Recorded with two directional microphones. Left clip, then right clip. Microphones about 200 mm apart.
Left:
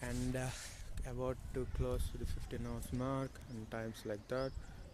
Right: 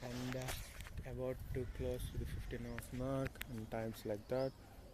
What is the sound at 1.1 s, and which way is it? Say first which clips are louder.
Speech: left 2 dB; 30° left (ahead or behind).